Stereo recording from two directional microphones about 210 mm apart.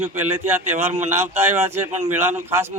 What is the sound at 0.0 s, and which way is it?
Speech, 10° right (ahead or behind).